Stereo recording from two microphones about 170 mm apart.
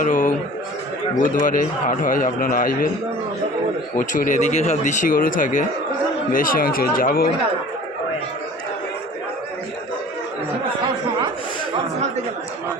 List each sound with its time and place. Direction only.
0.0 s chuckle: 50° left (ahead or behind)
1.2 s a man's voice: 50° left (ahead or behind)
3.9 s a man's voice: 50° left (ahead or behind)